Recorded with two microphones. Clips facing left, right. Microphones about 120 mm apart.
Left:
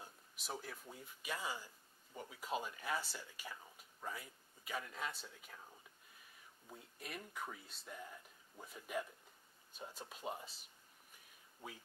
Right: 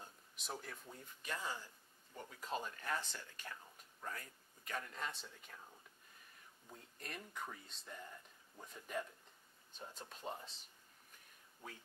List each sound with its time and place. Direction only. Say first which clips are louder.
0.0 s speech: left 1 dB; 5° left (ahead or behind)
6.7 s speech: left 1 dB; 5° left (ahead or behind)